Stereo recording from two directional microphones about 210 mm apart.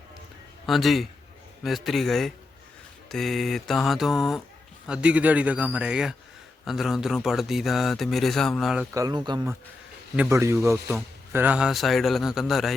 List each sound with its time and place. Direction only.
0.6 s a man's voice: centre (ahead or behind)
8.9 s a man's voice: 15° right (ahead or behind); by 12.7 s centre (ahead or behind)